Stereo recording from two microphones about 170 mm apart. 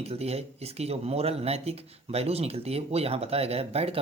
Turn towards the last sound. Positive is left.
turn(degrees=-35)  # may be behind; listen again after turning